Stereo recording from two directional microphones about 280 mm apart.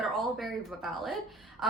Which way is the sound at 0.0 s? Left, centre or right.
Centre.